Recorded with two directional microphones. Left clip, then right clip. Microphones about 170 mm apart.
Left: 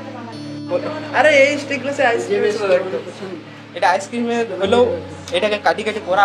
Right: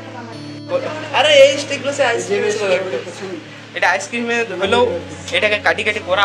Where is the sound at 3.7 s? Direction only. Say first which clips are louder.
Even; 20° left (ahead or behind).